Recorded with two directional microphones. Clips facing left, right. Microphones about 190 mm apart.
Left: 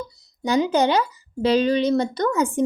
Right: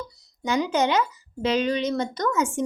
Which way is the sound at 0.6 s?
35° left (ahead or behind).